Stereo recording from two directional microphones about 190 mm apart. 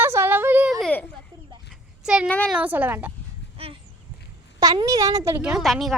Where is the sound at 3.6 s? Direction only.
30° right (ahead or behind).